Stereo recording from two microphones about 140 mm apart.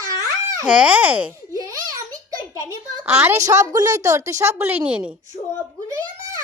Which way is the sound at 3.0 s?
20° right (ahead or behind).